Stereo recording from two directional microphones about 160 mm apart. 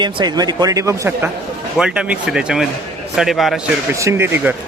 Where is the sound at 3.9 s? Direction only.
15° right (ahead or behind).